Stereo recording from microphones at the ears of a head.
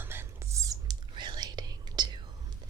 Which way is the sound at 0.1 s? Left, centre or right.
Right.